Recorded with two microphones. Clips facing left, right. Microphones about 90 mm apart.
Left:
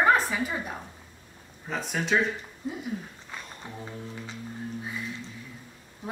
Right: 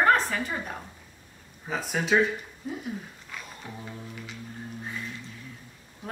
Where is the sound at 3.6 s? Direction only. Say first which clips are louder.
Even; 20° left (ahead or behind).